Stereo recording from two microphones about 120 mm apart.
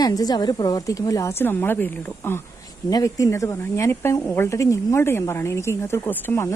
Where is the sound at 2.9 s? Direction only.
30° left (ahead or behind).